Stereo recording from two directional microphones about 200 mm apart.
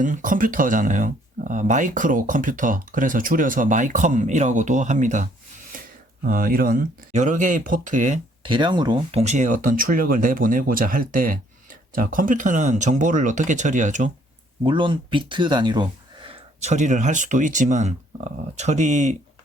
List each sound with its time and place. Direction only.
0.0 s speech: 40° right (ahead or behind)
5.7 s a sound: 45° right (ahead or behind)
6.2 s speech: 45° right (ahead or behind)
8.4 s speech: 25° right (ahead or behind); by 14.1 s 40° right (ahead or behind)
14.6 s speech: 25° right (ahead or behind)